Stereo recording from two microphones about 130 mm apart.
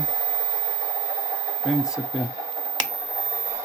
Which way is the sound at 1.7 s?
Centre (ahead or behind).